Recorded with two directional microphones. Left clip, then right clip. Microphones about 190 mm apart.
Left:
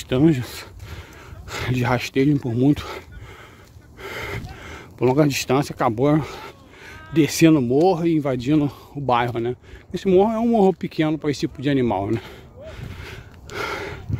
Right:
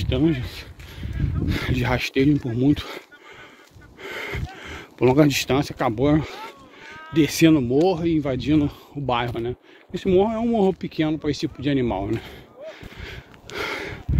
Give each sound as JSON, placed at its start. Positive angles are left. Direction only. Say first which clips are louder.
{"t": 0.1, "sound": "speech", "louder": "left 4 dB", "side_deg": 40}
{"t": 1.5, "sound": "speech", "louder": "left 2 dB", "side_deg": 30}
{"t": 2.3, "sound": "speech", "louder": "left 1 dB", "side_deg": 35}
{"t": 4.0, "sound": "a sound", "louder": "even", "side_deg": 25}
{"t": 4.6, "sound": "a sound", "louder": "right 2 dB", "side_deg": 10}
{"t": 5.3, "sound": "speech", "louder": "left 1 dB", "side_deg": 20}
{"t": 5.8, "sound": "livestock", "louder": "left 1 dB", "side_deg": 20}
{"t": 7.2, "sound": "speech", "louder": "left 1 dB", "side_deg": 30}
{"t": 13.5, "sound": "a sound", "louder": "left 1 dB", "side_deg": 15}